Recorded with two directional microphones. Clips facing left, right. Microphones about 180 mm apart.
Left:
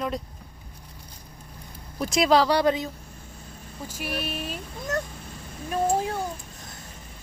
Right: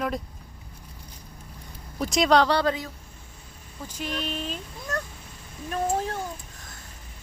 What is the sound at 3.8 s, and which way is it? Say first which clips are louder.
Speech: even; 10° left (ahead or behind).